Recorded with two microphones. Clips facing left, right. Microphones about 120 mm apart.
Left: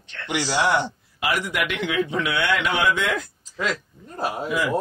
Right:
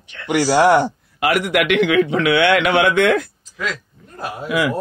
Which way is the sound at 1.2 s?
70° right (ahead or behind).